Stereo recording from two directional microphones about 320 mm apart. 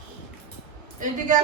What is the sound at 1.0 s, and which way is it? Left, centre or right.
Speech, right.